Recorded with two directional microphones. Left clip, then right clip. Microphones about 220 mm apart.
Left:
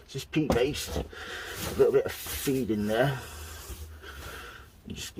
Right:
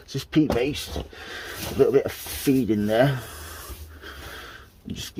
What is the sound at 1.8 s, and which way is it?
Speech, 40° right (ahead or behind).